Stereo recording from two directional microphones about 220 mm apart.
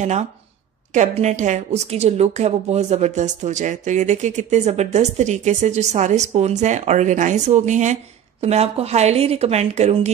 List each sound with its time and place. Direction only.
0.0 s speech: 30° right (ahead or behind)